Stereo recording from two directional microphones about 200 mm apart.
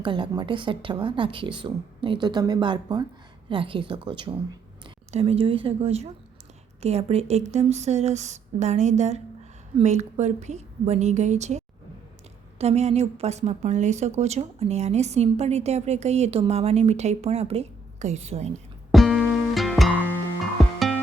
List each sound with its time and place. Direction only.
0.0 s a woman's voice: 25° right (ahead or behind)
18.9 s music: centre (ahead or behind)